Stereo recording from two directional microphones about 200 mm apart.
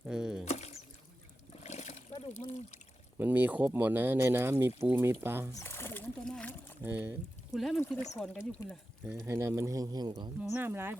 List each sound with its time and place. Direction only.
0.0 s a sound: 5° right (ahead or behind)
0.4 s a sound: 35° left (ahead or behind)
1.6 s water: 35° left (ahead or behind)
3.2 s speech: 10° right (ahead or behind)
5.5 s splash: 10° left (ahead or behind)
6.8 s speech: 10° right (ahead or behind)
9.0 s speech: 15° right (ahead or behind)
10.5 s speech: 10° right (ahead or behind)